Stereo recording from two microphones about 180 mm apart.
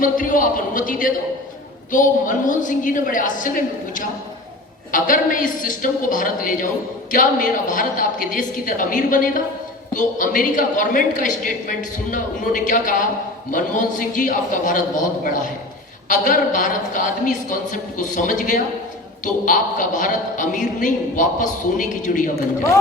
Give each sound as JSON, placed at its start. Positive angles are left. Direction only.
{"t": 0.0, "sound": "a woman's voice", "side_deg": 50}